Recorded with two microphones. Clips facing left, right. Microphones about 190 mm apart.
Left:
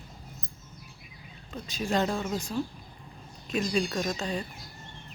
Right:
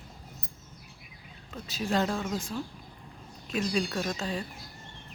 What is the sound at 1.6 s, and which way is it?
Speech, centre (ahead or behind).